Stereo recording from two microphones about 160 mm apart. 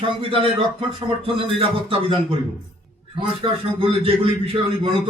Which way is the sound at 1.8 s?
35° right (ahead or behind).